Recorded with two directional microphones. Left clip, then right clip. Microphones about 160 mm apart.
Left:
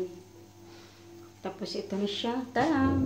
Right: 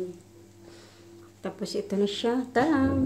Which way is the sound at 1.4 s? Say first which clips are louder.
Right 3 dB; 70° right (ahead or behind).